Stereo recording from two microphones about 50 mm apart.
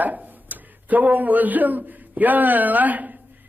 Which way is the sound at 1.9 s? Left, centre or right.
Right.